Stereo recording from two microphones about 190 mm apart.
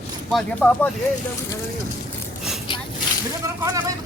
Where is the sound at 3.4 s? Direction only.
15° right (ahead or behind).